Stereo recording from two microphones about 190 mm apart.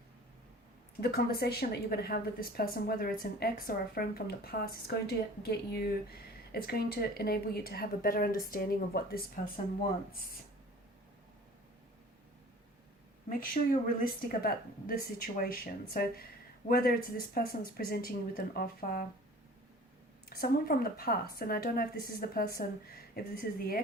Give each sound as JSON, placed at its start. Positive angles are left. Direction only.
{"t": 1.0, "sound": "a woman's voice", "side_deg": 55}
{"t": 13.4, "sound": "a woman's voice", "side_deg": 50}
{"t": 20.4, "sound": "a woman's voice", "side_deg": 50}